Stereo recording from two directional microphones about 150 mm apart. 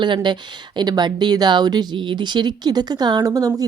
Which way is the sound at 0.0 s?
30° right (ahead or behind).